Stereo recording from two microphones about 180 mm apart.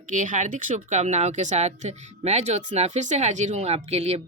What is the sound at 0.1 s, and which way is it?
Speech, 45° right (ahead or behind).